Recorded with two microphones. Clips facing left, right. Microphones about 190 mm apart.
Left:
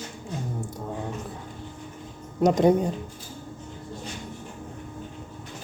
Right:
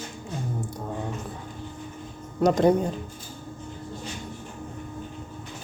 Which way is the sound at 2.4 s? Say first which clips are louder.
Even; 20° left (ahead or behind).